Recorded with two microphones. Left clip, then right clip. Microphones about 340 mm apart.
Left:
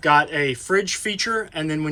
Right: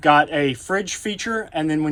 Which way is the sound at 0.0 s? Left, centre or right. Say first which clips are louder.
Right 2 dB; centre.